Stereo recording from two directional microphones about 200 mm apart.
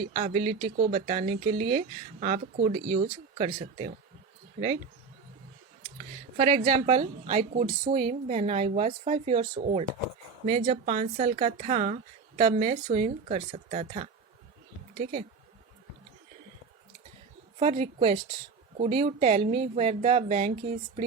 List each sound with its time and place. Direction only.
0.0 s speech: 45° right (ahead or behind)
6.0 s a sound: 40° right (ahead or behind)
6.8 s speech: 30° right (ahead or behind)
7.3 s a woman's voice: 45° right (ahead or behind)
17.6 s speech: 30° right (ahead or behind)